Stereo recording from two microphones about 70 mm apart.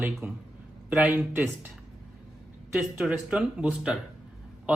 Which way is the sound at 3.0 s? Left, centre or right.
Centre.